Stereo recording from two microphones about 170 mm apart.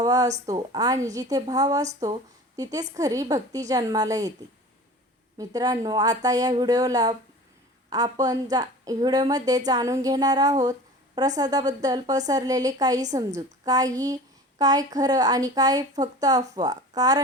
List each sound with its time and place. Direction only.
0.0 s a woman's voice: 20° right (ahead or behind)
5.4 s a woman's voice: 20° right (ahead or behind)